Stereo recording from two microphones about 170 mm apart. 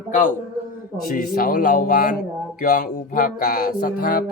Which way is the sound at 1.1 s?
60° left (ahead or behind).